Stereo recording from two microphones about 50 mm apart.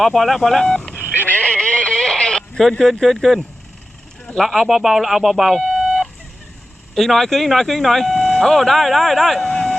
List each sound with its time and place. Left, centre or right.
0.0 s speech: centre
0.9 s sheep: left
1.3 s a sound: left
2.6 s speech: centre